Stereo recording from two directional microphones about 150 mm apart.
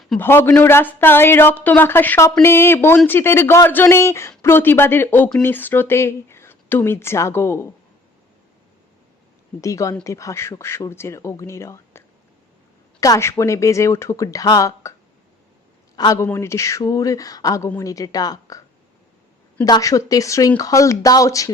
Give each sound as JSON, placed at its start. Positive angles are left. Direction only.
{"t": 0.2, "sound": "speech", "side_deg": 15}
{"t": 9.6, "sound": "speech", "side_deg": 20}
{"t": 16.0, "sound": "speech", "side_deg": 20}
{"t": 19.6, "sound": "speech", "side_deg": 25}